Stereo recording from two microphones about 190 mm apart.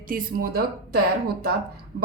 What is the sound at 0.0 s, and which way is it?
Speech, 50° right (ahead or behind).